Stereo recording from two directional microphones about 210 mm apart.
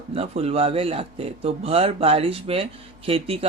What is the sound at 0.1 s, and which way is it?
Speech, 30° right (ahead or behind).